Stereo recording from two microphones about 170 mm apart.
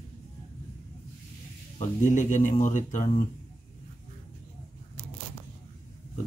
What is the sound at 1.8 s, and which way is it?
Speech, 45° left (ahead or behind).